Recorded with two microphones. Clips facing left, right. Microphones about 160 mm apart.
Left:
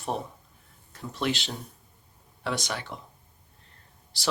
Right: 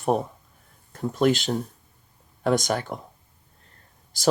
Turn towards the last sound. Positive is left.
turn(degrees=-45)  # may be behind; listen again after turning